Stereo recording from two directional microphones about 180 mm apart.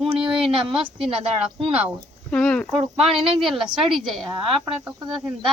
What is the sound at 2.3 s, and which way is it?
Speech, 5° left (ahead or behind).